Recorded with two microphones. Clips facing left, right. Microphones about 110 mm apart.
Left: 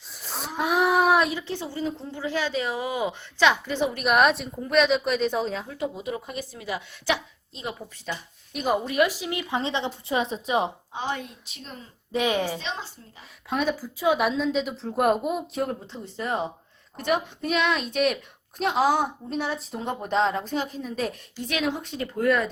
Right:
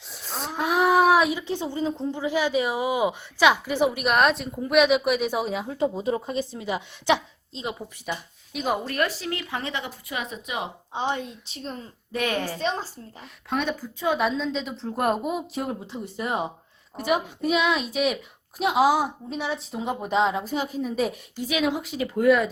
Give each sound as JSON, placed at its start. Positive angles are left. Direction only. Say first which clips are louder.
{"t": 0.2, "sound": "a sound", "louder": "even", "side_deg": 0}
{"t": 1.3, "sound": "a woman's voice", "louder": "right 3 dB", "side_deg": -15}
{"t": 4.0, "sound": "a woman's voice", "louder": "left 1 dB", "side_deg": 0}
{"t": 5.6, "sound": "speech", "louder": "right 5 dB", "side_deg": -30}
{"t": 8.5, "sound": "a woman's voice", "louder": "left 3 dB", "side_deg": 0}
{"t": 10.9, "sound": "speech", "louder": "right 3 dB", "side_deg": -20}
{"t": 12.1, "sound": "a woman's voice", "louder": "left 2 dB", "side_deg": 15}
{"t": 12.5, "sound": "a woman's voice", "louder": "right 6 dB", "side_deg": -45}
{"t": 13.5, "sound": "a woman's voice", "louder": "left 1 dB", "side_deg": 0}